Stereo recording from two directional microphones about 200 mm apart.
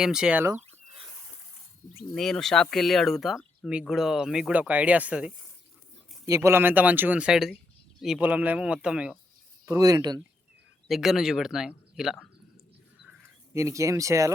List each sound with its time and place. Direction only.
0.0 s speech: 5° right (ahead or behind)
2.1 s speech: centre (ahead or behind)
9.6 s speech: 15° right (ahead or behind)
10.8 s speech: centre (ahead or behind)
13.5 s speech: 15° right (ahead or behind)